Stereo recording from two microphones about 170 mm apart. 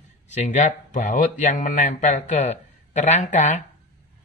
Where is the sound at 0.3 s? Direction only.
45° left (ahead or behind).